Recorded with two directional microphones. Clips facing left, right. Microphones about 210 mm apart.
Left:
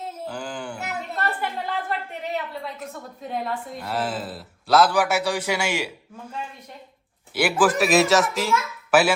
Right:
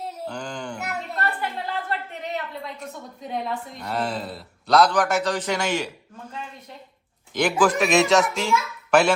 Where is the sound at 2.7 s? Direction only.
Centre (ahead or behind).